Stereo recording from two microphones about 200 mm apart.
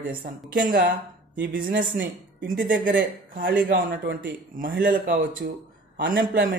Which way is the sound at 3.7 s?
65° right (ahead or behind).